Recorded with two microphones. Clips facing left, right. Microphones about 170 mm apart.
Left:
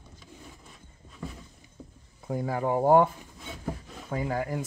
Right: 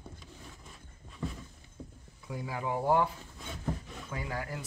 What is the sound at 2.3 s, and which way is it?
Speech, 45° left (ahead or behind).